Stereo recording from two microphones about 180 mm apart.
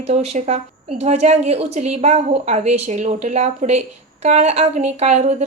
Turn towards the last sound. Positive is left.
turn(degrees=-40)  # may be behind; listen again after turning